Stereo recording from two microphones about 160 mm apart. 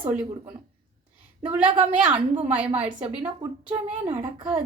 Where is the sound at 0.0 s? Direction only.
10° right (ahead or behind).